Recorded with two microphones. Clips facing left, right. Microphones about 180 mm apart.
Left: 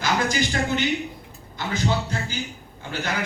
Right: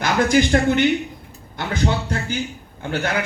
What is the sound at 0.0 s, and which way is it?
Speech, 55° right (ahead or behind).